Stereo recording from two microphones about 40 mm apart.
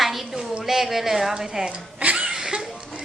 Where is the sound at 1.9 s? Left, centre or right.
Right.